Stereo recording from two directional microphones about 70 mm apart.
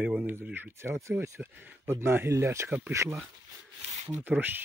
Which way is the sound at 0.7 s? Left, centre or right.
Right.